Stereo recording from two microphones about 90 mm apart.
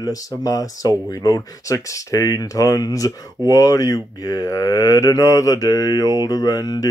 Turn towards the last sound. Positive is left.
turn(degrees=45)  # may be behind; listen again after turning